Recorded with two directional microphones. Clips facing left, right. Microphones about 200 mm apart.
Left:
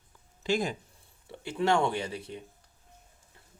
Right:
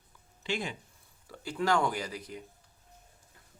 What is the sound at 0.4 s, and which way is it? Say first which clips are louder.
Speech: left 6 dB; 40° left (ahead or behind).